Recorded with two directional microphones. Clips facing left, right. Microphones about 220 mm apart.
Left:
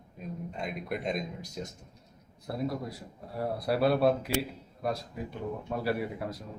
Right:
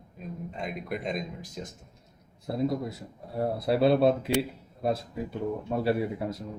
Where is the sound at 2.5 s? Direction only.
25° right (ahead or behind).